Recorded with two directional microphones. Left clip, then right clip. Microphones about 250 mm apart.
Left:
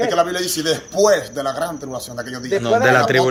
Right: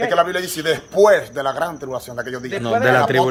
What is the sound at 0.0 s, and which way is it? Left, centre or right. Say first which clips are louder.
Speech: even; centre.